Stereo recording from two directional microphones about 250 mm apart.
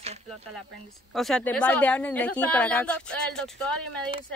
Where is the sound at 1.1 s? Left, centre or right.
Centre.